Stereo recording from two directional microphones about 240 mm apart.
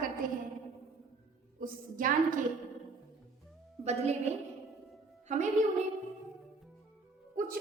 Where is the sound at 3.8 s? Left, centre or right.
Right.